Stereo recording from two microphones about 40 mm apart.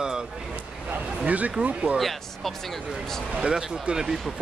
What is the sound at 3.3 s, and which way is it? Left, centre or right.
Speech, centre.